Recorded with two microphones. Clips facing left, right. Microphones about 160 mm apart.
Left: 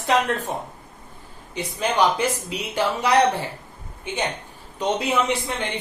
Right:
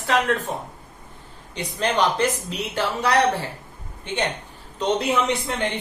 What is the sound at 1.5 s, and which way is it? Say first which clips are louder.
A man's voice: even; 10° left (ahead or behind).